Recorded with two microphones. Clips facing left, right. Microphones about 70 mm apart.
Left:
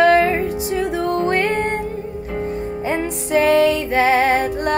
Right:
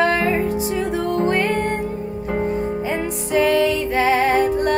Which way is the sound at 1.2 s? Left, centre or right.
Left.